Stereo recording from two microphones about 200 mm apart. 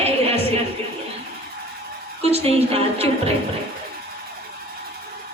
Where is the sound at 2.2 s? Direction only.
30° right (ahead or behind).